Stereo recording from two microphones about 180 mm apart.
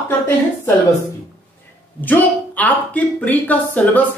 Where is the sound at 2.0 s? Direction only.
10° left (ahead or behind).